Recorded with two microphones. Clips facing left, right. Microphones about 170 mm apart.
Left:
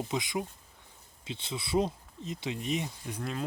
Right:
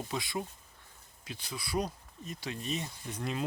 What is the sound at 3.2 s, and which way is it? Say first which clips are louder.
Speech: right 1 dB; 5° right (ahead or behind).